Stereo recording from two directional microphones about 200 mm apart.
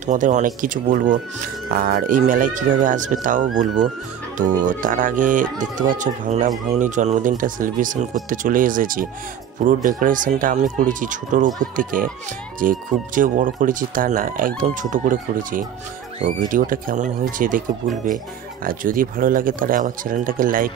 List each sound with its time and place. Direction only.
0.0 s speech: 40° right (ahead or behind)